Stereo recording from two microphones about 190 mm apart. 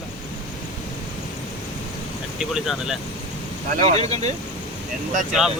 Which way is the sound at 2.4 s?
5° right (ahead or behind).